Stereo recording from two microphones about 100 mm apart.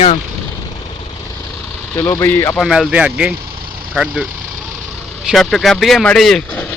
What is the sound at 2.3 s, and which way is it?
Speech, 20° left (ahead or behind).